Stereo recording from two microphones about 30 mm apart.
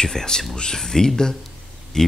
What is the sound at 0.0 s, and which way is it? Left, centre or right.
Speech, left.